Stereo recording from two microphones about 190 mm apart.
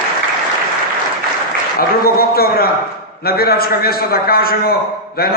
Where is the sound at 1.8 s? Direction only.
50° left (ahead or behind).